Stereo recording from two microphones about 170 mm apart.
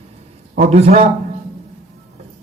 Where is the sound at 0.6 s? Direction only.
35° right (ahead or behind).